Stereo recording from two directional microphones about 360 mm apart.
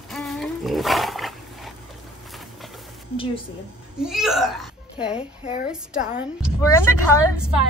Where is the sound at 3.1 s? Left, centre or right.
Centre.